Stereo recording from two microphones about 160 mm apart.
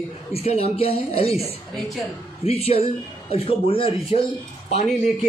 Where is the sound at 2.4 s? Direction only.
40° left (ahead or behind).